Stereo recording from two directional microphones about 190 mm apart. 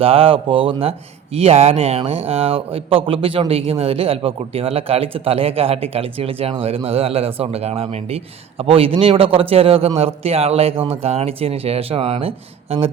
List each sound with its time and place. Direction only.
0.0 s speech: 30° right (ahead or behind)